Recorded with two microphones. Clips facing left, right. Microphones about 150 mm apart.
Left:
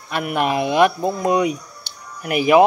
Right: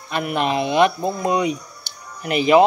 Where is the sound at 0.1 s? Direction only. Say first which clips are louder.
Left 1 dB; 15° left (ahead or behind).